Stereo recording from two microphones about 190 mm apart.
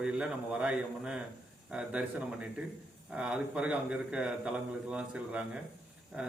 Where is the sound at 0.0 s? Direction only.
5° right (ahead or behind).